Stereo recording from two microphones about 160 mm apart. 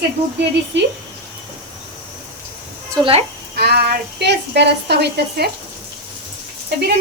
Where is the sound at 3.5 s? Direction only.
90° right.